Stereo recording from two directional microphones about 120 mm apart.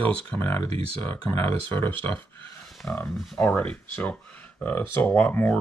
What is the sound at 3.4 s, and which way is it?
Speech, 10° left (ahead or behind).